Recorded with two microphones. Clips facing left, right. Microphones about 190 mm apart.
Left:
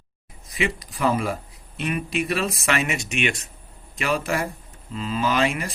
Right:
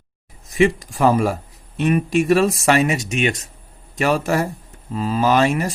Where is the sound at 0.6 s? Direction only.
45° right (ahead or behind).